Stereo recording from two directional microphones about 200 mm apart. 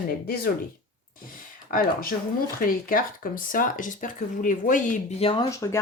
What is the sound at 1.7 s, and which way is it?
A woman's voice, 40° left (ahead or behind).